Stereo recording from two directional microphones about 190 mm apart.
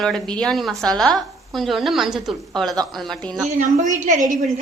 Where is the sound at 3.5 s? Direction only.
40° right (ahead or behind).